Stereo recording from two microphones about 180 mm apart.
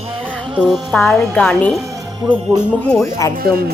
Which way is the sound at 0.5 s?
5° right (ahead or behind).